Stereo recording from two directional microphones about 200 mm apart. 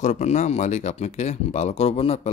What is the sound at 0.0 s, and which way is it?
Speech, 35° left (ahead or behind).